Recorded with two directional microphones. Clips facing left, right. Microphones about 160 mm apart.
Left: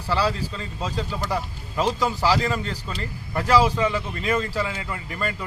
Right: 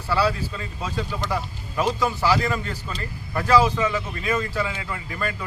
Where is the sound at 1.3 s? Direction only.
15° left (ahead or behind).